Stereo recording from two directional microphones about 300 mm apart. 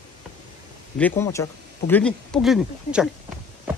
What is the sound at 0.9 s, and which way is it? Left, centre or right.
Speech, centre.